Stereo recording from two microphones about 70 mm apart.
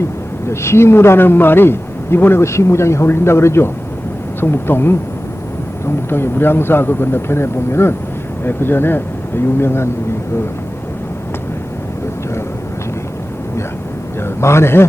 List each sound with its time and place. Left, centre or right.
0.4 s a man's voice: left
14.2 s a man's voice: left